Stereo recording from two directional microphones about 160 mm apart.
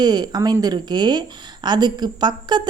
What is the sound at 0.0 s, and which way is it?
A woman's voice, 25° right (ahead or behind).